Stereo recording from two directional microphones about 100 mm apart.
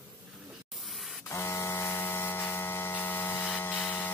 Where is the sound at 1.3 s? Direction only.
25° left (ahead or behind).